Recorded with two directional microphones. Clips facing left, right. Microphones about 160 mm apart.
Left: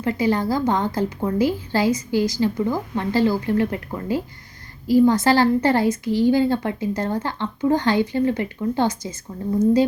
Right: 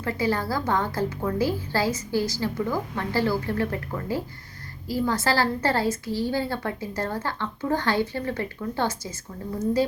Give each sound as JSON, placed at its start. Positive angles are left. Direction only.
{"t": 0.0, "sound": "a woman's voice", "side_deg": 20}